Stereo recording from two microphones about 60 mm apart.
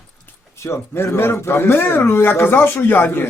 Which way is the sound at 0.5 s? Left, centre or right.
Left.